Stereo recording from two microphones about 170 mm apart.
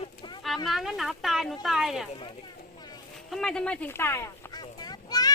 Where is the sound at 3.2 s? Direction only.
5° left (ahead or behind); by 5.3 s 25° left (ahead or behind).